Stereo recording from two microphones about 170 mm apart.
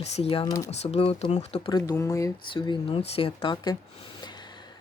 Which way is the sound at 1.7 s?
20° left (ahead or behind).